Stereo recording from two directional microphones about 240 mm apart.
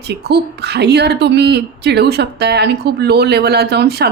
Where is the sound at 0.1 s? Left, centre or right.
Right.